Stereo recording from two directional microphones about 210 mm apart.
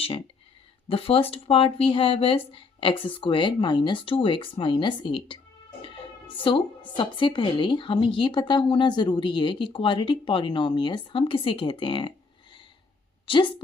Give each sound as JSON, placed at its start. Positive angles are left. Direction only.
{"t": 0.9, "sound": "a woman's voice", "side_deg": 25}
{"t": 6.5, "sound": "a woman's voice", "side_deg": 25}
{"t": 13.2, "sound": "a woman's voice", "side_deg": 25}